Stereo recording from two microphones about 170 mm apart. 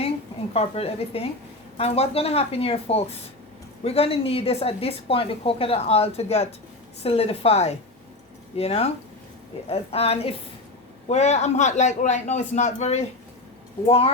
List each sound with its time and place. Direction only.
0.5 s a woman's voice: 35° left (ahead or behind)